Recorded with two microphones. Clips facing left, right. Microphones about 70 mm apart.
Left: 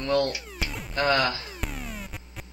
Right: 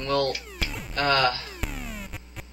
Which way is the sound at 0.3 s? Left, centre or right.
Centre.